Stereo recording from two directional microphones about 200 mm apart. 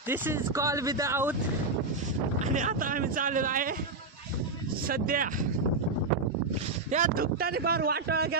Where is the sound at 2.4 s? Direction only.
40° right (ahead or behind).